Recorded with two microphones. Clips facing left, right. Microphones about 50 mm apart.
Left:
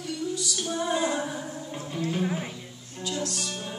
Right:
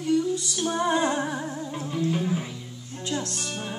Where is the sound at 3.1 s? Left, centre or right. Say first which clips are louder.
Right 1 dB; right.